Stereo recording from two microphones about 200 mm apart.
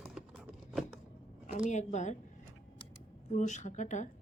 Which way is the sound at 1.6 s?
35° left (ahead or behind).